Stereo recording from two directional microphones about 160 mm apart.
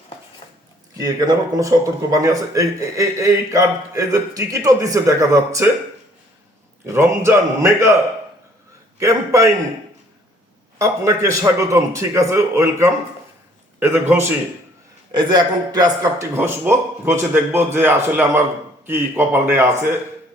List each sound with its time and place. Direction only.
0.9 s speech: 25° right (ahead or behind)
6.8 s a man's voice: 15° right (ahead or behind)
9.0 s speech: 20° right (ahead or behind)
10.8 s a man's voice: 20° right (ahead or behind)
15.1 s a man's voice: 30° right (ahead or behind)